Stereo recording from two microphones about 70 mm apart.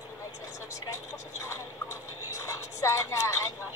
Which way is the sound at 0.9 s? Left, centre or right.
Left.